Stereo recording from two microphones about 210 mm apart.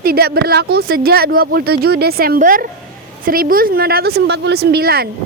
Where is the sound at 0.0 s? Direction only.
50° right (ahead or behind).